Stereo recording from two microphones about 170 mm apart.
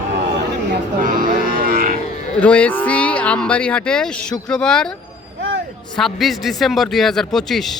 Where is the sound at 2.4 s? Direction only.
10° left (ahead or behind).